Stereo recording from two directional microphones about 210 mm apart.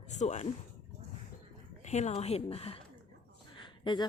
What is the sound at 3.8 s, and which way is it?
Speech, 20° left (ahead or behind).